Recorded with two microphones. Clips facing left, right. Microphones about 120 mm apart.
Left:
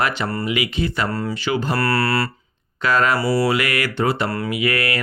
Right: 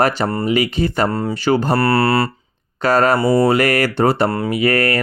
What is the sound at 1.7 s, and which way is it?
Mantra, 25° right (ahead or behind).